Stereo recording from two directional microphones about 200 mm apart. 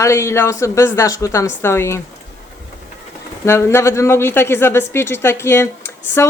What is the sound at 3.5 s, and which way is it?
Speech, 15° left (ahead or behind).